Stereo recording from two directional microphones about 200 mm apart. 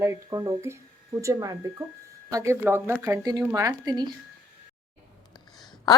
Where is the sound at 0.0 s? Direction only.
15° right (ahead or behind).